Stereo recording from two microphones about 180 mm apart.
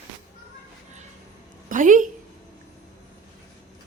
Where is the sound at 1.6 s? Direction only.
45° right (ahead or behind).